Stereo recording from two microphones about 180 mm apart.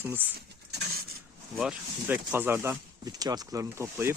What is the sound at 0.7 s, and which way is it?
Patter, 65° right (ahead or behind).